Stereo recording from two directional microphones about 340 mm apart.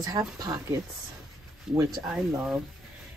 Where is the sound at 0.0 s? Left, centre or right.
Centre.